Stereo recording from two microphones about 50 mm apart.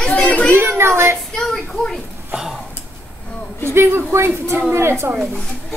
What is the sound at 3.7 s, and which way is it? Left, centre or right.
Speech, right.